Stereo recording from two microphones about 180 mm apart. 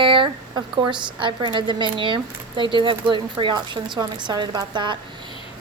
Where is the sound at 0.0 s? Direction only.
30° right (ahead or behind).